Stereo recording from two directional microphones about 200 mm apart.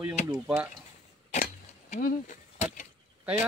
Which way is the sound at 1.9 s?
40° left (ahead or behind).